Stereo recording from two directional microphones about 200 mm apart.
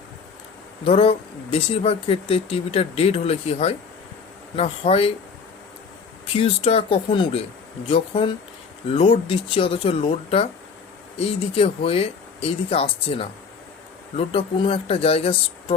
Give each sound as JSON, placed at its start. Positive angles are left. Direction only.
{"t": 0.9, "sound": "speech", "side_deg": 30}
{"t": 6.3, "sound": "speech", "side_deg": 30}